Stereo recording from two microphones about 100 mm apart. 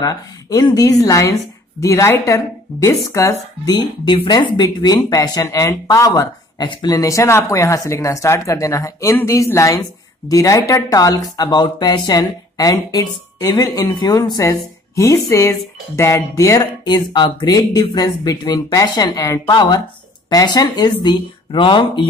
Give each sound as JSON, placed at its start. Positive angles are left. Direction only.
{"t": 0.0, "sound": "a woman's voice", "side_deg": 35}
{"t": 3.6, "sound": "speech", "side_deg": 50}
{"t": 6.6, "sound": "speech", "side_deg": 50}
{"t": 14.4, "sound": "speech", "side_deg": 30}
{"t": 16.8, "sound": "speech", "side_deg": 50}